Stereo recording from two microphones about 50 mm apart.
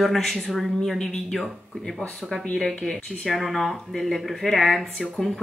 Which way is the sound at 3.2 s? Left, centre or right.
Centre.